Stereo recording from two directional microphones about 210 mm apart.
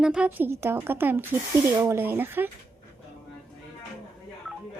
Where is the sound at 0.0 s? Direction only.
5° right (ahead or behind).